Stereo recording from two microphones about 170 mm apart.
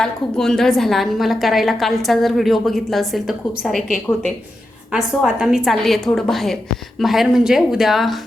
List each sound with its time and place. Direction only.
0.0 s a woman's voice: 5° left (ahead or behind)